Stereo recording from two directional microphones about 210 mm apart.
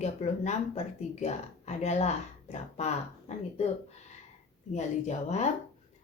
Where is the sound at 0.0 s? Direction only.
30° left (ahead or behind).